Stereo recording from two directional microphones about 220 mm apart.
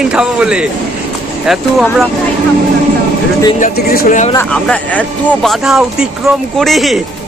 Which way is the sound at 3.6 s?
45° left (ahead or behind).